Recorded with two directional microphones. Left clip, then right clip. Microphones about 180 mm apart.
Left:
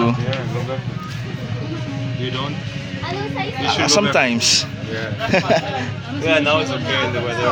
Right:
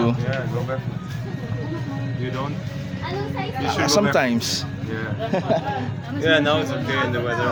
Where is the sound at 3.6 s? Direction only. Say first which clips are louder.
Left 3 dB; 15° right (ahead or behind); by 5.7 s centre (ahead or behind).